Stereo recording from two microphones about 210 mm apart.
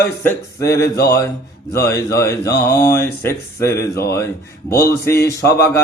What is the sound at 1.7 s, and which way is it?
Speech, 15° left (ahead or behind).